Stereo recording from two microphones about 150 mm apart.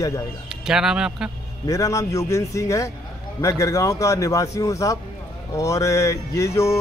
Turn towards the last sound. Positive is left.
turn(degrees=20)  # may be behind; listen again after turning